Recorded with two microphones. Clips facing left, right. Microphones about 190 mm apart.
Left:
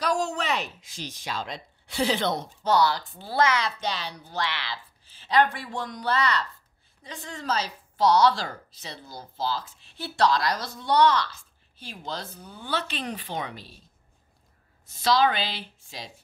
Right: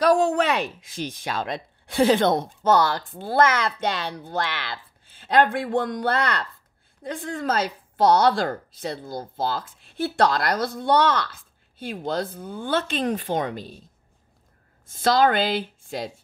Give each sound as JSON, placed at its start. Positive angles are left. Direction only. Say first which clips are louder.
{"t": 0.0, "sound": "a woman's voice", "louder": "right 8 dB", "side_deg": -55}
{"t": 14.9, "sound": "a woman's voice", "louder": "right 3 dB", "side_deg": -50}